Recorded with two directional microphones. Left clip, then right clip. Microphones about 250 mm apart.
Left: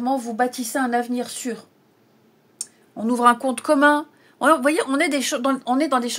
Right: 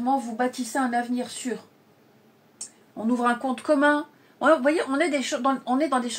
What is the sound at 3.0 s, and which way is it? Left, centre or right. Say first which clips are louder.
Speech: left 7 dB; left.